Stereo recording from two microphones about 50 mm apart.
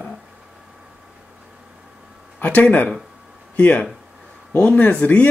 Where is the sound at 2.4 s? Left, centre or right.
Left.